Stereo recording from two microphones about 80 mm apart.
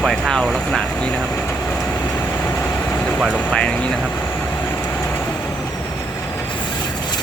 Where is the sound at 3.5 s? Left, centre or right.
Centre.